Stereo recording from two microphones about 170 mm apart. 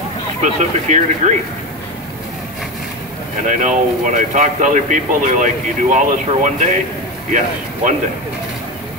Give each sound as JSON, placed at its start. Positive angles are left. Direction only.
{"t": 0.4, "sound": "speech", "side_deg": -45}
{"t": 3.4, "sound": "speech", "side_deg": -50}